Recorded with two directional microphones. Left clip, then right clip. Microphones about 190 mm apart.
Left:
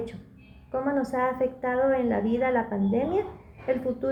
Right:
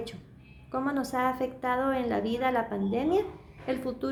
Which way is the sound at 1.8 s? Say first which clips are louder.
Left 4 dB; 25° right (ahead or behind).